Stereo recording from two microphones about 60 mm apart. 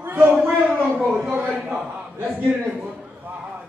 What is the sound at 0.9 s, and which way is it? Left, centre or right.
Speech, right.